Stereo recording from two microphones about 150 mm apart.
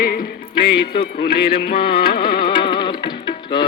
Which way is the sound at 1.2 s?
90° left.